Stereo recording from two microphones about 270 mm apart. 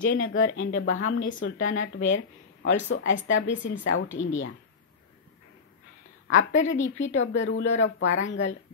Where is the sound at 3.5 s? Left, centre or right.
Left.